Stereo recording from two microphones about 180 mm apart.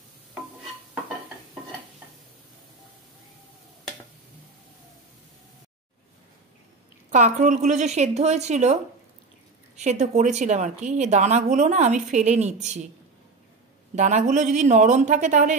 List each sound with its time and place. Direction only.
7.1 s a woman's voice: 40° right (ahead or behind)
9.8 s a woman's voice: 40° right (ahead or behind)
13.9 s speech: 40° right (ahead or behind)